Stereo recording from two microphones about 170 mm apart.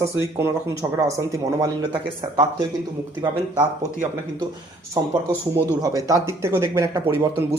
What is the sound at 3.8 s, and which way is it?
Speech, 20° right (ahead or behind).